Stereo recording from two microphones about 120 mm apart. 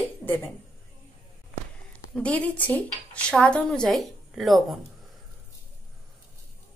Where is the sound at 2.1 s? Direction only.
10° left (ahead or behind).